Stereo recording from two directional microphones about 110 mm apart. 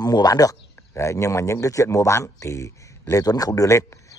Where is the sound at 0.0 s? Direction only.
35° left (ahead or behind).